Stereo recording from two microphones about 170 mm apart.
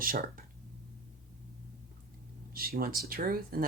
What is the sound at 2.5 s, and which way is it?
Speech, 60° right (ahead or behind).